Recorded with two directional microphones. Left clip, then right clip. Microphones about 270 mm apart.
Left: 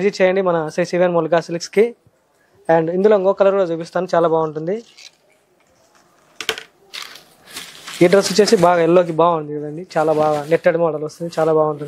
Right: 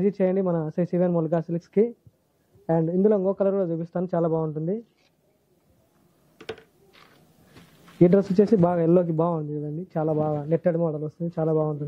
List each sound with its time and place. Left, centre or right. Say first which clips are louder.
0.0 s speech: left 8 dB; centre
6.4 s a sound: left 14 dB; centre
9.8 s speech: left 10 dB; centre
11.5 s speech: left 9 dB; left